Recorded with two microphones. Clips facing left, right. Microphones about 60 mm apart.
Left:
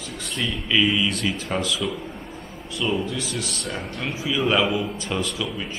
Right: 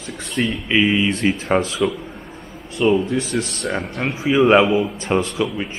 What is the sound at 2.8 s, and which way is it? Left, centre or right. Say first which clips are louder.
Speech: right 8 dB; right.